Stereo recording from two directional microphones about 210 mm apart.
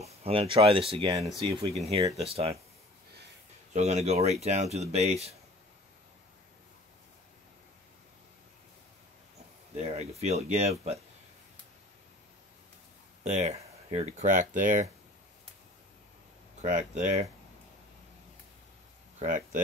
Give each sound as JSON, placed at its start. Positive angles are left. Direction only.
{"t": 0.0, "sound": "speech", "side_deg": -30}
{"t": 3.7, "sound": "speech", "side_deg": -30}
{"t": 9.8, "sound": "speech", "side_deg": -30}
{"t": 13.2, "sound": "speech", "side_deg": -35}
{"t": 16.6, "sound": "speech", "side_deg": -35}
{"t": 19.2, "sound": "speech", "side_deg": -40}